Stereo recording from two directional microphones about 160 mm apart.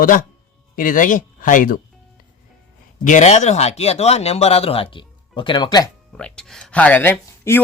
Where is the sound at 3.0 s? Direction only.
50° left (ahead or behind); by 5.9 s 25° left (ahead or behind).